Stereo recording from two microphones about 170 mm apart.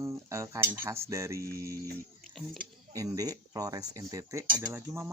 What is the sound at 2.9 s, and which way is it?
Speech, 20° right (ahead or behind).